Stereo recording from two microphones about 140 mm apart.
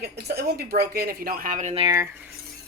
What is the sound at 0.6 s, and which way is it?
Speech, 90° right.